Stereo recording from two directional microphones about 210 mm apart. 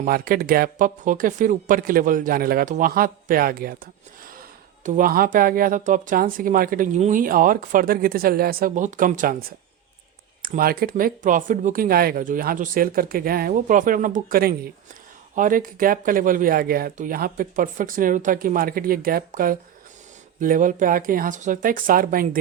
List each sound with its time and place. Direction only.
0.0 s speech: 45° right (ahead or behind)